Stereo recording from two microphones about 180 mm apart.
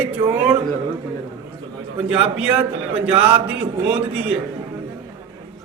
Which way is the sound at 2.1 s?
5° right (ahead or behind).